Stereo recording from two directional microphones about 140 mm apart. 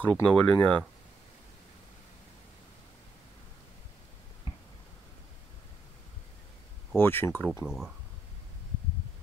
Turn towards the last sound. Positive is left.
turn(degrees=-5)  # may be behind; listen again after turning